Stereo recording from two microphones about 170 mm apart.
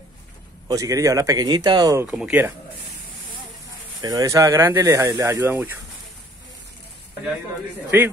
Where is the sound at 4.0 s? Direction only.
20° right (ahead or behind).